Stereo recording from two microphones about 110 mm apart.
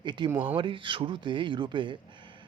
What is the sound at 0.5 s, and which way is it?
Speech, 50° right (ahead or behind).